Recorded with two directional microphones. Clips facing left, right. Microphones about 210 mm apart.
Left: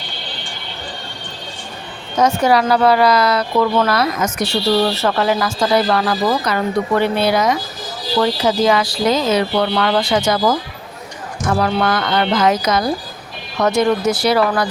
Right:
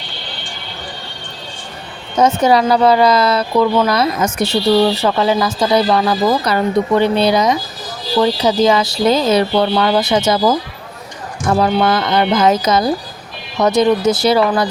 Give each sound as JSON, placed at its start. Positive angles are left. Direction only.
{"t": 2.1, "sound": "speech", "side_deg": -20}
{"t": 3.6, "sound": "speech", "side_deg": -10}
{"t": 3.9, "sound": "speech", "side_deg": -25}
{"t": 4.9, "sound": "speech", "side_deg": -15}
{"t": 6.4, "sound": "speech", "side_deg": -30}
{"t": 6.9, "sound": "speech", "side_deg": -20}
{"t": 9.6, "sound": "speech", "side_deg": -20}
{"t": 11.5, "sound": "speech", "side_deg": -20}